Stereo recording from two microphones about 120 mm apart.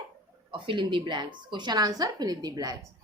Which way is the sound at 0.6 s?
45° right (ahead or behind).